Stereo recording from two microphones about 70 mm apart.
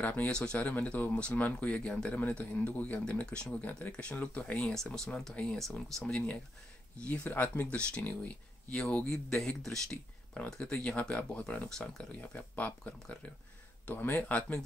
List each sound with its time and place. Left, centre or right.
0.0 s speech: left
0.3 s speech: centre
0.6 s speech: left
4.7 s speech: centre
10.3 s speech: centre